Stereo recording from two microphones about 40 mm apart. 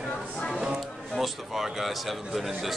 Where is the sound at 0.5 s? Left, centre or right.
Centre.